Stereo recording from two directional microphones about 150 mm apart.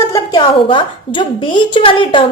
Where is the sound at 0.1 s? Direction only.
25° left (ahead or behind).